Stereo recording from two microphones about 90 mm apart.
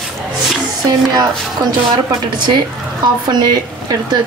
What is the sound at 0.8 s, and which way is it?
Speech, 45° right (ahead or behind).